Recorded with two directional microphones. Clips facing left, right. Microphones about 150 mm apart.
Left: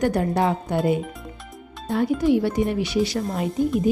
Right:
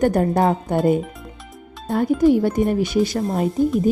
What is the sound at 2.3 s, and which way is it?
Speech, 45° right (ahead or behind).